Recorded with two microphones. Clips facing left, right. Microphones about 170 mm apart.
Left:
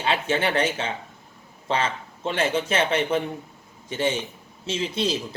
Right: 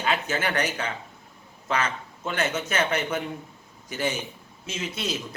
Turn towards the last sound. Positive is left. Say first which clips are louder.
# left 6 dB
turn(degrees=30)  # may be behind; listen again after turning